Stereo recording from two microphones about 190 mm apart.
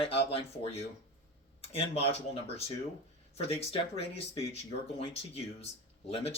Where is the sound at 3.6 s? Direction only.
30° left (ahead or behind).